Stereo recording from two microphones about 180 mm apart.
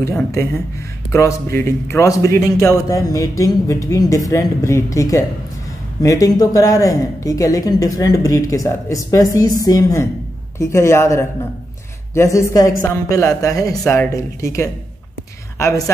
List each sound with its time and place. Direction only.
0.0 s speech: 15° left (ahead or behind)